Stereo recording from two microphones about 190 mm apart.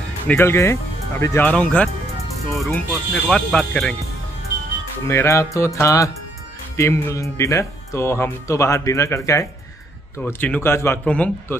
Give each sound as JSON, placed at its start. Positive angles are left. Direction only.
{"t": 0.3, "sound": "speech", "side_deg": 15}
{"t": 5.0, "sound": "speech", "side_deg": 15}